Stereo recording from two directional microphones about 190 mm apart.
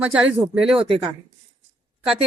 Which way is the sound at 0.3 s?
5° right (ahead or behind).